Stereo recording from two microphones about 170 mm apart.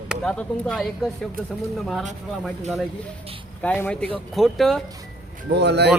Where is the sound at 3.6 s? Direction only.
10° left (ahead or behind).